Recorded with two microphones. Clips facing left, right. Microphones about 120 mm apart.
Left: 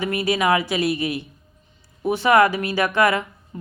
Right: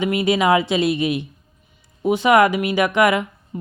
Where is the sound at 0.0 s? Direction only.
20° right (ahead or behind).